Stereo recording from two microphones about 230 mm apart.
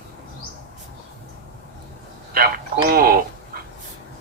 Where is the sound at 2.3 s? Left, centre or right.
Right.